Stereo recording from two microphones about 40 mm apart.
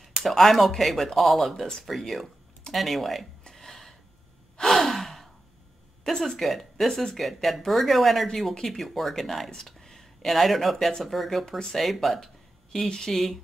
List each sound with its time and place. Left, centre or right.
0.2 s speech: centre
3.4 s a sound: centre
4.6 s sigh: centre
6.1 s speech: centre
6.9 s speech: centre
7.2 s speech: centre
10.9 s speech: centre
11.1 s speech: centre
11.4 s speech: centre
11.8 s speech: centre
12.7 s speech: centre